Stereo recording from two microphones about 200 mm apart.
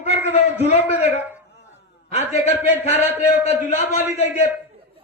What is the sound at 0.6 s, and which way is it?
A man's voice, 35° left (ahead or behind).